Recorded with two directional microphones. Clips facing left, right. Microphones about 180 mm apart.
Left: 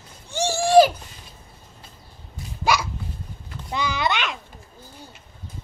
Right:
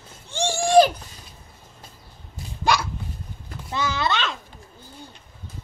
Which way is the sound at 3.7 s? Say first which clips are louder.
Even; 15° left (ahead or behind).